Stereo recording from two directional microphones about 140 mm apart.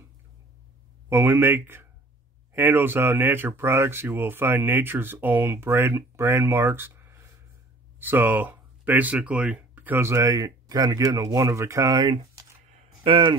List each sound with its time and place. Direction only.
1.0 s speech: 15° right (ahead or behind); by 13.4 s 35° right (ahead or behind)